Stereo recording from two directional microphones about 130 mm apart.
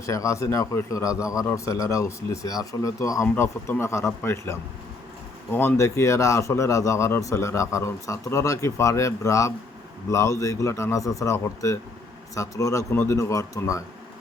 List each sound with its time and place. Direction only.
0.0 s a man's voice: 25° left (ahead or behind)